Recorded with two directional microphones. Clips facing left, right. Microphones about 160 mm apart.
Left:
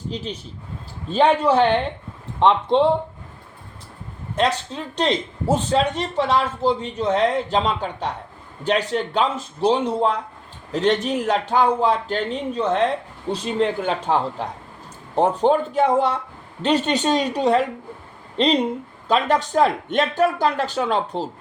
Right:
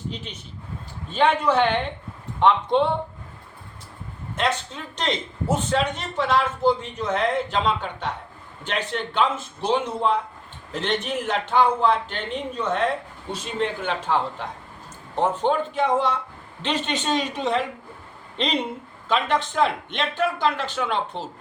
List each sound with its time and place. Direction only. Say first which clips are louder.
1.1 s speech: left 3 dB; 35° left (ahead or behind)
4.4 s speech: left 4 dB; 35° left (ahead or behind)